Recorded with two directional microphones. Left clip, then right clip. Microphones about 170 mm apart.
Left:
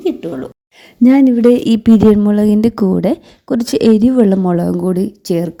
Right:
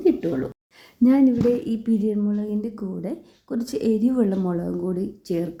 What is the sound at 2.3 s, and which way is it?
A woman's voice, 80° left.